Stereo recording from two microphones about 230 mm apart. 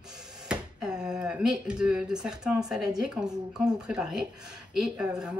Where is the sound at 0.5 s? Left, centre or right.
Centre.